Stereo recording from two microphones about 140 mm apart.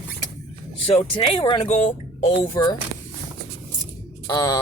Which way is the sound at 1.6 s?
55° left (ahead or behind).